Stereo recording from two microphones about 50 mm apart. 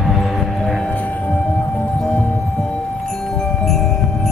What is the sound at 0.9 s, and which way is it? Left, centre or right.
Music, left.